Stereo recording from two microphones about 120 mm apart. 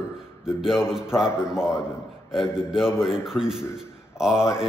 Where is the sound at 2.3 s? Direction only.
5° right (ahead or behind).